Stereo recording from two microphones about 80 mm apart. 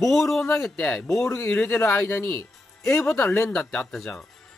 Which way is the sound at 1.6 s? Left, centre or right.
Left.